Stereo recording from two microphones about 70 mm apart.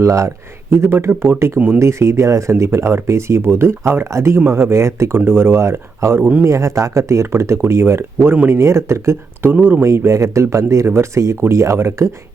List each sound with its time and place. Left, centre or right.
0.0 s speech: right
1.5 s speech: centre
1.8 s speech: right
9.5 s speech: right
9.8 s speech: right